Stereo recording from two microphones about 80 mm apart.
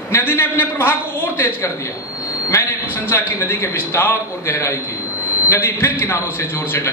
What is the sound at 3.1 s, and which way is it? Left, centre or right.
A man's voice, left.